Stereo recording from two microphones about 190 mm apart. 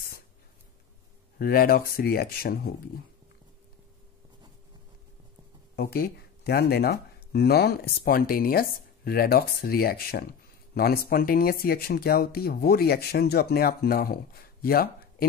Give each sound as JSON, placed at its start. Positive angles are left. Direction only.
{"t": 1.4, "sound": "speech", "side_deg": 50}
{"t": 5.8, "sound": "speech", "side_deg": 55}